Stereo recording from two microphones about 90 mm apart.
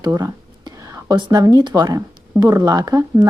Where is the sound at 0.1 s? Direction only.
40° right (ahead or behind).